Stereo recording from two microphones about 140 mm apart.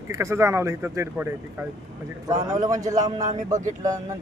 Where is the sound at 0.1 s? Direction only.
20° right (ahead or behind).